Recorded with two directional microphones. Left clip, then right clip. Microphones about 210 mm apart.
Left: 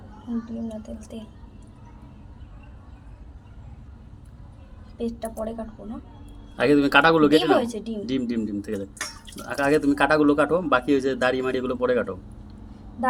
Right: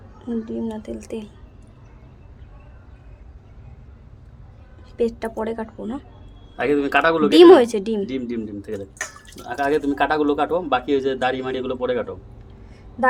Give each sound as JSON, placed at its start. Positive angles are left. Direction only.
{"t": 0.7, "sound": "a woman's voice", "side_deg": -45}
{"t": 4.9, "sound": "a woman's voice", "side_deg": -45}
{"t": 6.6, "sound": "a man's voice", "side_deg": 15}
{"t": 7.3, "sound": "a woman's voice", "side_deg": -50}
{"t": 8.0, "sound": "a man's voice", "side_deg": 15}